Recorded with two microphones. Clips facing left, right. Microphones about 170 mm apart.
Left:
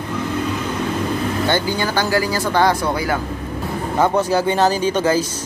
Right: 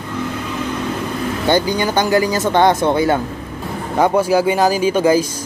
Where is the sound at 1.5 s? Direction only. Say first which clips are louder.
Right 7 dB; 15° right (ahead or behind).